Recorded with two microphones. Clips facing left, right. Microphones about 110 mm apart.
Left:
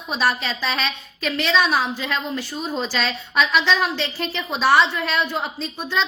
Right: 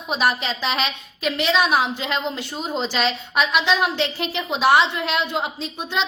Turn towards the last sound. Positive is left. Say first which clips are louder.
# left 1 dB
turn(degrees=-15)  # may be behind; listen again after turning